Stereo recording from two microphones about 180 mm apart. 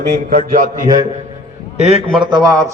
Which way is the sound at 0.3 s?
50° right (ahead or behind).